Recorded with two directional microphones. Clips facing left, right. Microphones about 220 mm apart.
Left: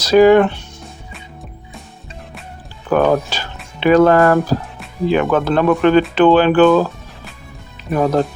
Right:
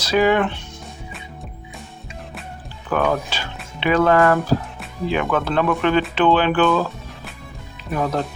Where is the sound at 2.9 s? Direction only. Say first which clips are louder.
Left 6 dB; 40° left (ahead or behind).